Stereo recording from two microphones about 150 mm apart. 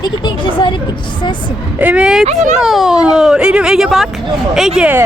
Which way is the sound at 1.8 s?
10° right (ahead or behind).